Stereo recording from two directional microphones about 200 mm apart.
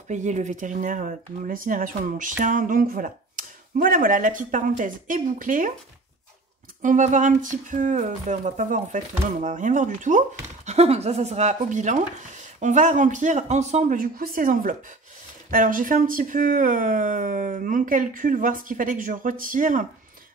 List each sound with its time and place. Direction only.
0.1 s speech: 35° right (ahead or behind)
6.8 s speech: 40° right (ahead or behind)